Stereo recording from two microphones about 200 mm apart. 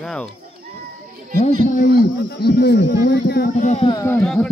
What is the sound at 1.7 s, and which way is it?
Speech, 45° left (ahead or behind).